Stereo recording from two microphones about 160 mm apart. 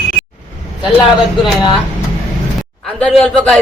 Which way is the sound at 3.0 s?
5° left (ahead or behind).